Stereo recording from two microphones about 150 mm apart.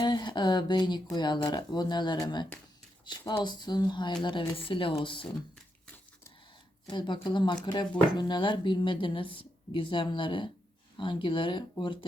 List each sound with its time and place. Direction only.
0.0 s speech: 30° left (ahead or behind)
6.9 s speech: 30° left (ahead or behind)